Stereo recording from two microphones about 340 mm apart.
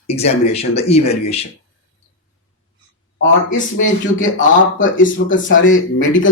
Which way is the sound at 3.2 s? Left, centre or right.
Left.